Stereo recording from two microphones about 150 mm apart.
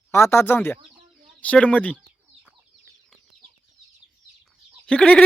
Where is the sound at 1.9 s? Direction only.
5° right (ahead or behind).